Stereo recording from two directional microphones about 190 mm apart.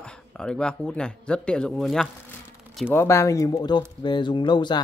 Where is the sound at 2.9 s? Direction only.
15° left (ahead or behind).